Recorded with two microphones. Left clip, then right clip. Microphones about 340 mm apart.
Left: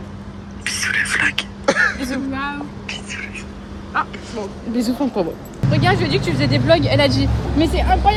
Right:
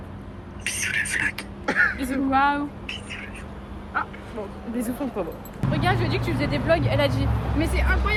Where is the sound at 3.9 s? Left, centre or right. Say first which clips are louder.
Left 6 dB; centre.